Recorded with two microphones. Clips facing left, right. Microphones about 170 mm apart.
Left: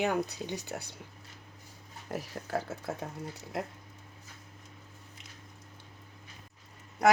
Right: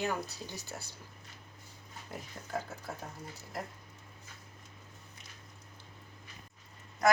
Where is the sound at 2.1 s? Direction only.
85° left.